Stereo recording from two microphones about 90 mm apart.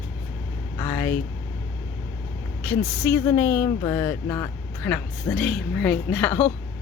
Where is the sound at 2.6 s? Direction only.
25° left (ahead or behind).